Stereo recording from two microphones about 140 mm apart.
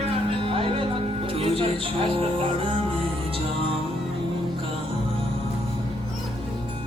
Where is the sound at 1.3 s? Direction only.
40° right (ahead or behind).